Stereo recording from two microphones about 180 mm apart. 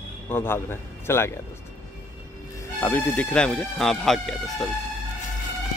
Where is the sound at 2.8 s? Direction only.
10° left (ahead or behind).